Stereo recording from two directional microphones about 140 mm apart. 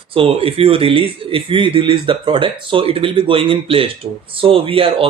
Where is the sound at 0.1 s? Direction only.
40° right (ahead or behind).